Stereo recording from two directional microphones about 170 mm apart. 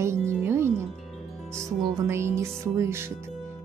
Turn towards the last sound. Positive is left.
turn(degrees=-15)  # may be behind; listen again after turning